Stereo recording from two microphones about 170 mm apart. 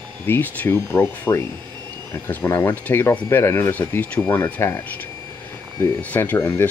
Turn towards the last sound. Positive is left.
turn(degrees=15)  # may be behind; listen again after turning